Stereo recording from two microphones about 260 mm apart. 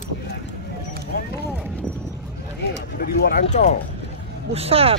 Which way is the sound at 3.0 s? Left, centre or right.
Left.